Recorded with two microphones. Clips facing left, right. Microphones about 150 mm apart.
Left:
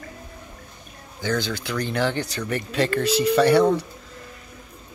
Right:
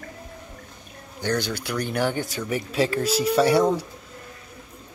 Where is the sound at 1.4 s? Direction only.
10° right (ahead or behind).